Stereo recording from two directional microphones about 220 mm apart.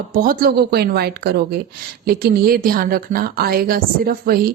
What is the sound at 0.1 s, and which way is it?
A woman's voice, 40° right (ahead or behind).